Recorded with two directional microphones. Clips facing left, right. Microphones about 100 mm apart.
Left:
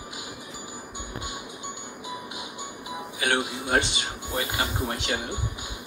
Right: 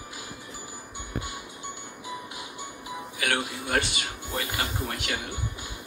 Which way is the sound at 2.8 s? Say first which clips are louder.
Left 2 dB; 20° left (ahead or behind).